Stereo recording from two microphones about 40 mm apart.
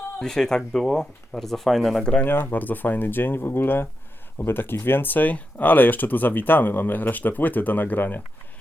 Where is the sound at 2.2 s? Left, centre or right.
Left.